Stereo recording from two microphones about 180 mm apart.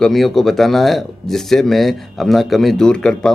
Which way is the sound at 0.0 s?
Centre (ahead or behind).